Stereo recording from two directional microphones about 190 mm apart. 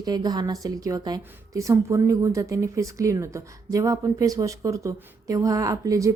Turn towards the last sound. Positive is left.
turn(degrees=-15)  # may be behind; listen again after turning